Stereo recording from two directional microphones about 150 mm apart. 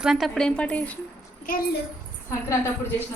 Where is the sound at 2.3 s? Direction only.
15° left (ahead or behind).